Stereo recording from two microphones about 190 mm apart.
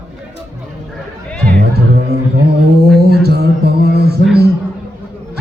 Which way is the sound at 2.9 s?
55° right (ahead or behind).